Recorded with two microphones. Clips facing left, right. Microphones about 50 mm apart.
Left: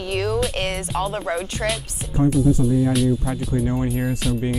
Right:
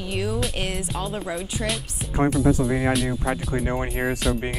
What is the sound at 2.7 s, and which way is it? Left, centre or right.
Speech, right.